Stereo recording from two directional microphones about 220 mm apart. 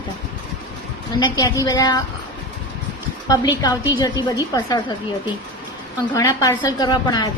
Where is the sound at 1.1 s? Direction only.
20° left (ahead or behind).